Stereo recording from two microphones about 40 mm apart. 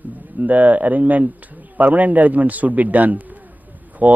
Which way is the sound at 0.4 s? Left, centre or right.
Right.